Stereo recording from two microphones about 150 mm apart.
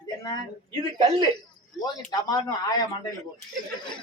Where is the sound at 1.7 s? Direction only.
25° left (ahead or behind).